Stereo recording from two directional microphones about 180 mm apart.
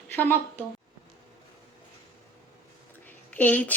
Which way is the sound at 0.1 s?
10° left (ahead or behind).